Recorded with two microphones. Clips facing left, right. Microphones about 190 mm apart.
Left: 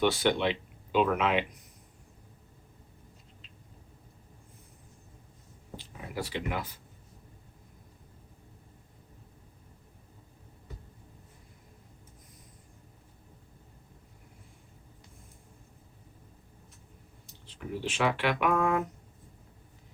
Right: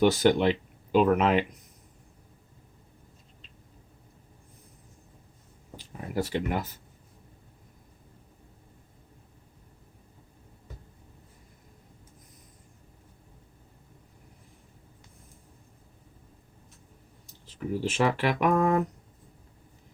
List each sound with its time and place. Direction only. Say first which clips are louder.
0.0 s speech: right 5 dB; 40° right (ahead or behind)
5.7 s speech: right 6 dB; 45° right (ahead or behind)
17.4 s speech: right 5 dB; 40° right (ahead or behind)